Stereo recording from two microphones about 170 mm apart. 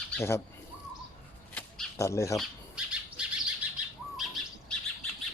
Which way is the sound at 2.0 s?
20° left (ahead or behind).